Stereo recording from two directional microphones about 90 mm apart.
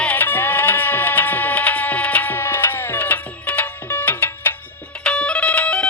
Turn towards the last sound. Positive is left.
turn(degrees=10)  # may be behind; listen again after turning